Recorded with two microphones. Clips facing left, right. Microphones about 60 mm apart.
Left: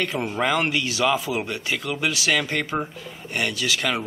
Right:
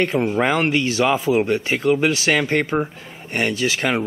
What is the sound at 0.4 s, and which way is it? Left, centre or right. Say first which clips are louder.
Speech: right 2 dB; right.